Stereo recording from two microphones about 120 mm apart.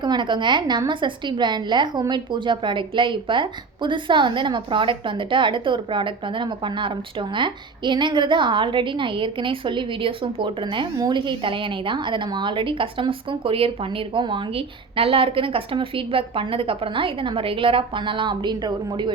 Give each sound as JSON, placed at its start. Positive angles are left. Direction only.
{"t": 0.0, "sound": "a woman's voice", "side_deg": -40}